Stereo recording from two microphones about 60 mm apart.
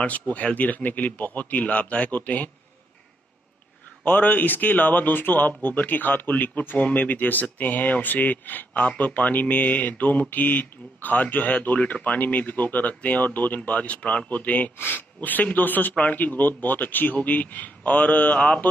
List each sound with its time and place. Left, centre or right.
0.0 s speech: left
4.0 s speech: left